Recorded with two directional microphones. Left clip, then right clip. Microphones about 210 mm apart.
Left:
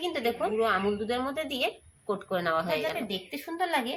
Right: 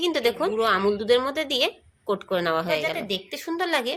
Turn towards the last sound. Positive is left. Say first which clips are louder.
# right 4 dB
turn(degrees=-50)  # may be behind; listen again after turning